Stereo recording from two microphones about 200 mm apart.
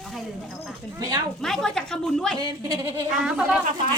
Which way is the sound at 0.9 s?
20° right (ahead or behind).